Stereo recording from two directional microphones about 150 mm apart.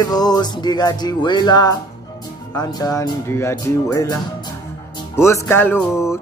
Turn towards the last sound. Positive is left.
turn(degrees=15)  # may be behind; listen again after turning